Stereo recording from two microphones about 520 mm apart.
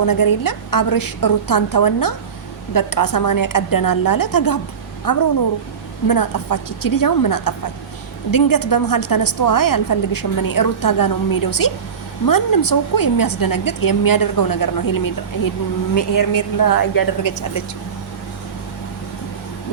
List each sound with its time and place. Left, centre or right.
0.0 s a woman's voice: left